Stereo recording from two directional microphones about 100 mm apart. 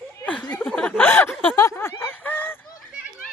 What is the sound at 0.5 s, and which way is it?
Speech, 15° left (ahead or behind).